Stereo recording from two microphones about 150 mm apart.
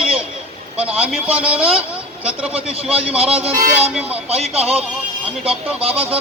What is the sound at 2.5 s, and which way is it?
Speech, 40° right (ahead or behind).